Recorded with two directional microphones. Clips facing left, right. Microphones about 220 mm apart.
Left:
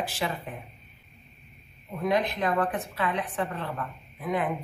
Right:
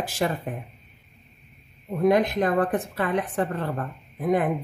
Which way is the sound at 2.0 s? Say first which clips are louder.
Right 6 dB; 50° right (ahead or behind).